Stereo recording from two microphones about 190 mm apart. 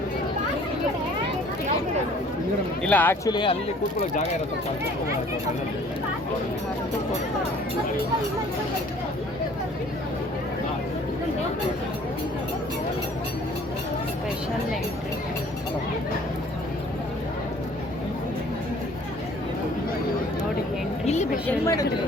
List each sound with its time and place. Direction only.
2.8 s a woman's voice: 10° left (ahead or behind)
3.2 s speech: 25° left (ahead or behind)
21.4 s a woman's voice: 15° left (ahead or behind)